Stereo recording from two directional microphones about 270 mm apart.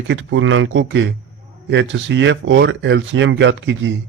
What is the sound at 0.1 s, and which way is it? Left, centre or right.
A man's voice, right.